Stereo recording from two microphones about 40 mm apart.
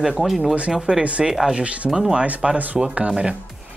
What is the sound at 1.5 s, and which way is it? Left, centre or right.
Speech, right.